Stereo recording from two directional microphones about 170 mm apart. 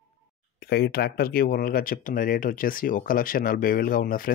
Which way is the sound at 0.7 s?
70° left (ahead or behind).